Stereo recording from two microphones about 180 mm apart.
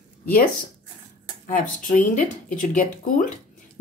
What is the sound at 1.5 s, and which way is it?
Speech, 45° left (ahead or behind).